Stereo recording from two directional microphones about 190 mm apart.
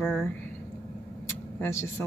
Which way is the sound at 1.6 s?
10° left (ahead or behind).